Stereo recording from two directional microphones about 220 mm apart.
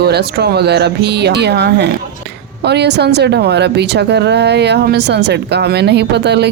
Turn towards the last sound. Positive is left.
turn(degrees=-50)  # may be behind; listen again after turning